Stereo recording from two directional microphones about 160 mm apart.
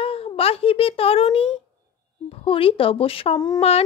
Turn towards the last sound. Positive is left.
turn(degrees=40)  # may be behind; listen again after turning